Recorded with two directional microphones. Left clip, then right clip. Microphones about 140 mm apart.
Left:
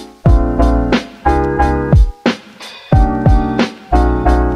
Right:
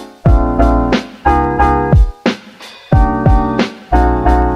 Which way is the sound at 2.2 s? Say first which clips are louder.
Even; centre (ahead or behind).